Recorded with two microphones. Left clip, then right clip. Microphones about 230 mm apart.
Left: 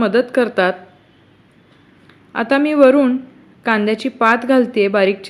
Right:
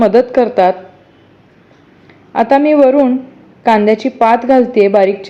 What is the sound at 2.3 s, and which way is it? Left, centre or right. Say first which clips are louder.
A woman's voice: right 7 dB; centre.